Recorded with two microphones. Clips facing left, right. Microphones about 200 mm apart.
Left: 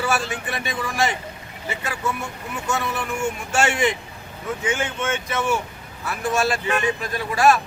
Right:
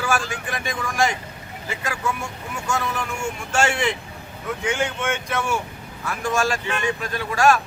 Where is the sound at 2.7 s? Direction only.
5° left (ahead or behind).